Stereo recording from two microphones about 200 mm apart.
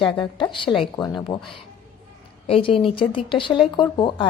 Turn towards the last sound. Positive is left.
turn(degrees=25)  # may be behind; listen again after turning